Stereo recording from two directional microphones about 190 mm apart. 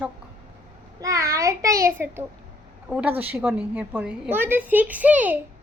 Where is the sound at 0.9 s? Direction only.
15° right (ahead or behind).